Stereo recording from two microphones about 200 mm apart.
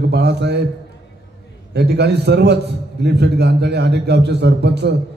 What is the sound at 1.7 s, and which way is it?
A man's voice, 55° right (ahead or behind).